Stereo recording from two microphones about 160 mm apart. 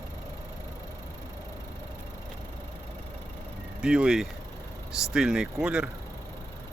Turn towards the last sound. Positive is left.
turn(degrees=-5)  # may be behind; listen again after turning